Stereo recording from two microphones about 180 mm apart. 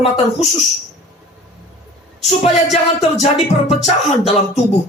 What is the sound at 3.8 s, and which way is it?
Speech, 35° left (ahead or behind).